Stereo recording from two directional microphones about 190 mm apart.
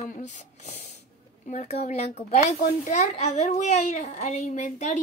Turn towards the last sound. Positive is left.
turn(degrees=40)  # may be behind; listen again after turning